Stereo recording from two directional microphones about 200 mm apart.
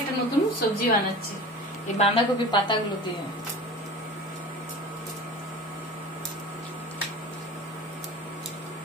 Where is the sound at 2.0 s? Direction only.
25° left (ahead or behind).